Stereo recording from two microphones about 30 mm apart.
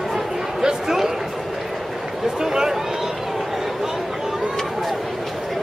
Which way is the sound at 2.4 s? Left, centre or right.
Centre.